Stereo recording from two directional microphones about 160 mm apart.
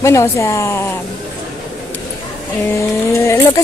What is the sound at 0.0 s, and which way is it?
Speech, 20° left (ahead or behind).